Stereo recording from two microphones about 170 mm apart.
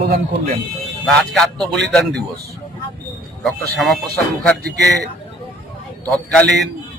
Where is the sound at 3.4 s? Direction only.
Centre (ahead or behind).